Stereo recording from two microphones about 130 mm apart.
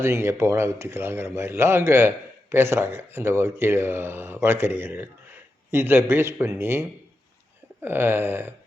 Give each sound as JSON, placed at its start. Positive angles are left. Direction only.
{"t": 0.0, "sound": "a man's voice", "side_deg": -20}